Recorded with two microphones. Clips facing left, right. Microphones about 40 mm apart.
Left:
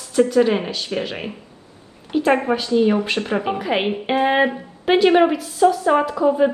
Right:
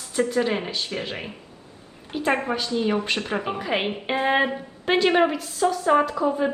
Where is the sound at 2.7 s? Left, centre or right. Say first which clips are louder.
Left 8 dB; left.